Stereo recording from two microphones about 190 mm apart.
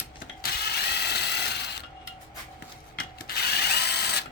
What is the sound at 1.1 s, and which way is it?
Mechanisms, 60° left (ahead or behind).